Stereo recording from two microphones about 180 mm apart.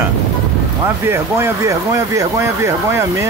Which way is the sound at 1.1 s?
15° right (ahead or behind).